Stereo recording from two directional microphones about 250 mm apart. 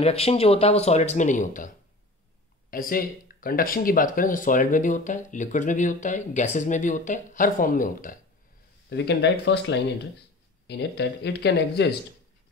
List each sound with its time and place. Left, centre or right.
0.0 s speech: left
2.7 s speech: left